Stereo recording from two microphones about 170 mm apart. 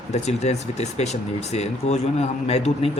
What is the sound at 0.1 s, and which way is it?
Speech, 40° left (ahead or behind).